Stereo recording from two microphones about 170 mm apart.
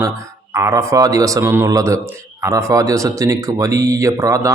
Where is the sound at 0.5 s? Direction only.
15° right (ahead or behind).